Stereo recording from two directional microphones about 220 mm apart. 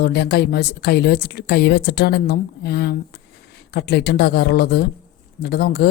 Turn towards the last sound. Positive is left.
turn(degrees=45)  # may be behind; listen again after turning